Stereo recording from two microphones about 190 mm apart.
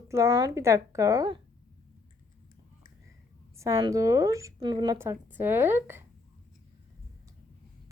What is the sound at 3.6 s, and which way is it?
Speech, 15° right (ahead or behind).